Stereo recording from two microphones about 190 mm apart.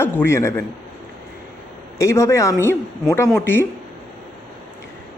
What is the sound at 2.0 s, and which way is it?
Speech, 15° left (ahead or behind).